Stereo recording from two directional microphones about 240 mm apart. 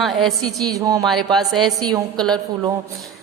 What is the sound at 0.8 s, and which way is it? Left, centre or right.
Speech, centre.